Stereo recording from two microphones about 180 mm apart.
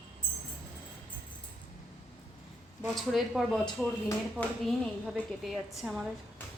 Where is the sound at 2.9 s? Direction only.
Centre (ahead or behind).